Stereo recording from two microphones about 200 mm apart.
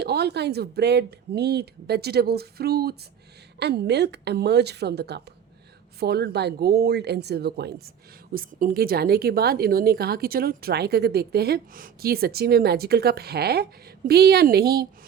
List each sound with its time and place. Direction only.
0.0 s a woman's voice: 55° right (ahead or behind)